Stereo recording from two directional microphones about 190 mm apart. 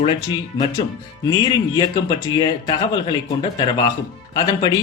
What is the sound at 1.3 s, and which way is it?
A man's voice, 20° left (ahead or behind).